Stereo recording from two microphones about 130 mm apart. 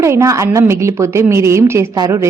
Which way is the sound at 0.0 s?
20° right (ahead or behind).